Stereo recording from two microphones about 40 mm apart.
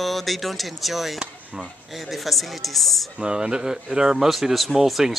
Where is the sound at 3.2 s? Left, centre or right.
Right.